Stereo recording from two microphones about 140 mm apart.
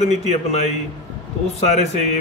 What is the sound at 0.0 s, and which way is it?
A man's voice, 55° left (ahead or behind).